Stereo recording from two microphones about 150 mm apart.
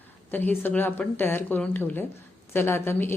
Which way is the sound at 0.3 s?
10° left (ahead or behind).